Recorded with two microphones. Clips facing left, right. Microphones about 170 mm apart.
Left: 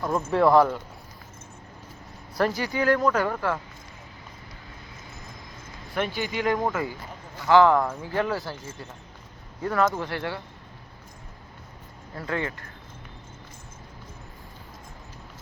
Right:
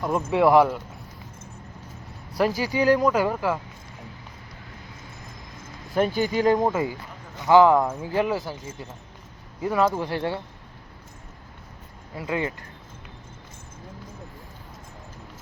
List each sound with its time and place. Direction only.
0.0 s speech: 10° right (ahead or behind)
2.6 s speech: 15° right (ahead or behind)
5.9 s speech: 40° right (ahead or behind)
6.7 s speech: 15° right (ahead or behind)
12.1 s speech: 10° right (ahead or behind)